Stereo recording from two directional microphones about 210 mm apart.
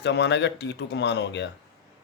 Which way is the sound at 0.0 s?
55° left (ahead or behind).